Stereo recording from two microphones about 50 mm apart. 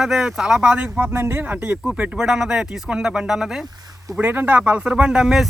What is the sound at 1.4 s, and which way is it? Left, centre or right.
Speech, right.